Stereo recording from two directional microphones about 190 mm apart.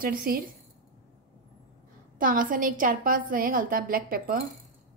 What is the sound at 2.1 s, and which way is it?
A woman's voice, 45° right (ahead or behind).